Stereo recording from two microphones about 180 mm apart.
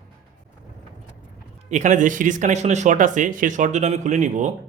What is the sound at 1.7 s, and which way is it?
A man's voice, 45° right (ahead or behind).